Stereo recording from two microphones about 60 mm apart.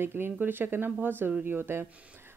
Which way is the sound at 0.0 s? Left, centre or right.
Right.